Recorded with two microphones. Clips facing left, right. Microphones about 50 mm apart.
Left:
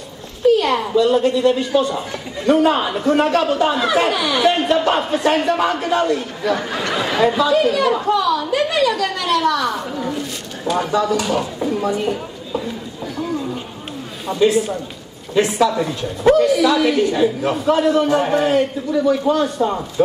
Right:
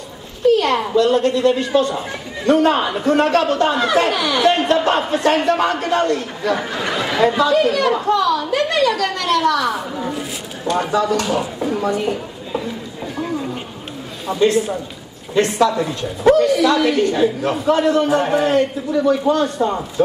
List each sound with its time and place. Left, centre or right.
0.5 s a child's voice: centre
12.5 s a sound: centre
14.2 s a man's voice: centre